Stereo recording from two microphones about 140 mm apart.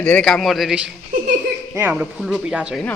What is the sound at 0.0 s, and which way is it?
Speech, 5° left (ahead or behind).